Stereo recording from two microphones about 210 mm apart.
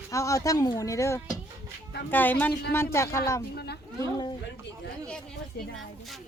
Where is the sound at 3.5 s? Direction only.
50° left (ahead or behind).